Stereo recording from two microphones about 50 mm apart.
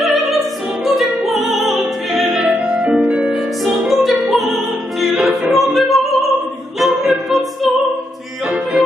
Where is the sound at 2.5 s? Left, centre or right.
Right.